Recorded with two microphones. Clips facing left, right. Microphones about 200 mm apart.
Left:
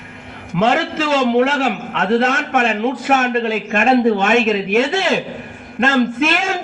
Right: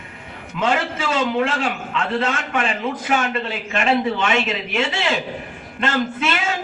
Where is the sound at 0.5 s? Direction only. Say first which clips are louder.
Left 5 dB; 75° left (ahead or behind).